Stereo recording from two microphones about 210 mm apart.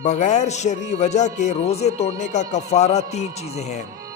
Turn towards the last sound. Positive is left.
turn(degrees=30)  # may be behind; listen again after turning